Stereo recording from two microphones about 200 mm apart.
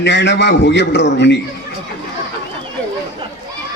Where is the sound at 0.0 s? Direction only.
60° left (ahead or behind).